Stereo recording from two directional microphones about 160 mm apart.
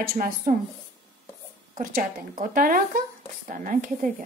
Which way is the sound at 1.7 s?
60° right (ahead or behind).